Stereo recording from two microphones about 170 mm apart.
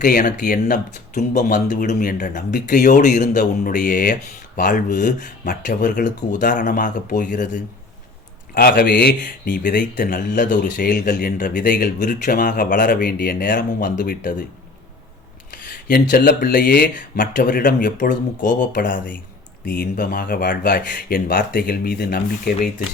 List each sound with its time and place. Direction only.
0.0 s speech: 50° left (ahead or behind)
8.5 s speech: 60° left (ahead or behind)
10.0 s speech: 50° left (ahead or behind)
15.9 s speech: 65° left (ahead or behind)